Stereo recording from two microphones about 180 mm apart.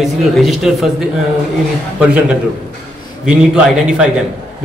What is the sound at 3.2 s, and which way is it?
Speech, 5° right (ahead or behind).